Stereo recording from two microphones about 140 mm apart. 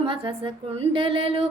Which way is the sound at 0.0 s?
40° right (ahead or behind).